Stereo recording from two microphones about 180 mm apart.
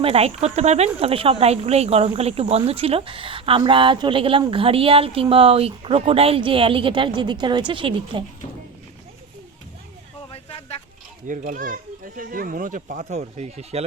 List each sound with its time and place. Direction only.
0.0 s a woman's voice: 35° right (ahead or behind)
11.3 s a child's voice: 45° right (ahead or behind)